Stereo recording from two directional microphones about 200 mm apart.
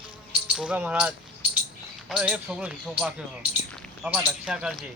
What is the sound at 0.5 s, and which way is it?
Speech, 5° right (ahead or behind).